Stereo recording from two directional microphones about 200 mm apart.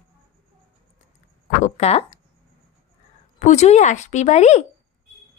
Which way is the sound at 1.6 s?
30° left (ahead or behind).